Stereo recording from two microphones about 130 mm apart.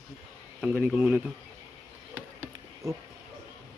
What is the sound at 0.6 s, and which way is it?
Speech, 10° right (ahead or behind).